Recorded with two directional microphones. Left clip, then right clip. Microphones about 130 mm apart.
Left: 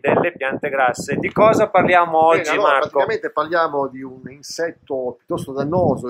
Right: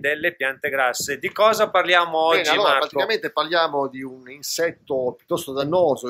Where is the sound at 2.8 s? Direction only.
Centre (ahead or behind).